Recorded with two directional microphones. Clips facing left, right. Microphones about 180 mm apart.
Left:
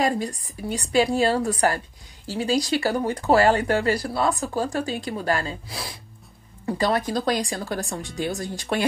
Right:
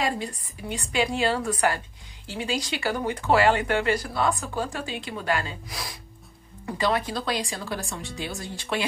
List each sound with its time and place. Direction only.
0.0 s speech: 40° left (ahead or behind)
6.6 s speech: 40° left (ahead or behind)